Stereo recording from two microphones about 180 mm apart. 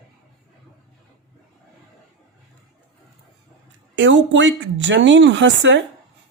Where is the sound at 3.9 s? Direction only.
90° right.